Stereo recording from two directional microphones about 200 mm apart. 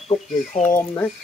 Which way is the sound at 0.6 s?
10° left (ahead or behind).